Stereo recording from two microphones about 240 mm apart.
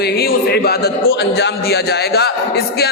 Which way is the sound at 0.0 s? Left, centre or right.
Left.